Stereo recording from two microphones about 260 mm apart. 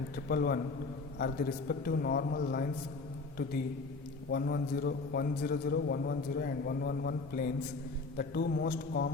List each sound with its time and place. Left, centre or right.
0.3 s a man's voice: left
4.3 s a man's voice: left